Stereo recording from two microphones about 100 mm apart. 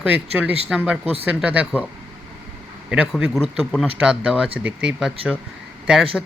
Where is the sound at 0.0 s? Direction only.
15° right (ahead or behind).